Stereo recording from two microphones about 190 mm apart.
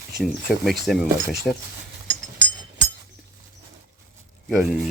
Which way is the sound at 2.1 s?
70° right (ahead or behind).